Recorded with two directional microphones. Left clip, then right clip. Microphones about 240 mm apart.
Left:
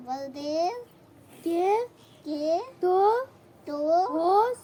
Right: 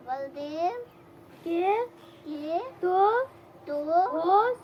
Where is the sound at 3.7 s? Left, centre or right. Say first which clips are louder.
Left 1 dB; left.